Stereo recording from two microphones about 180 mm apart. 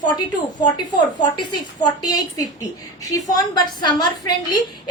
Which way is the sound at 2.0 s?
20° left (ahead or behind).